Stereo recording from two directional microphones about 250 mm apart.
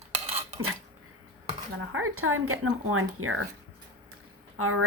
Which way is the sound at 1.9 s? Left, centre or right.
Right.